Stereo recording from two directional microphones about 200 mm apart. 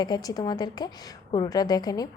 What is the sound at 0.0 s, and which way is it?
A woman's voice, 20° left (ahead or behind).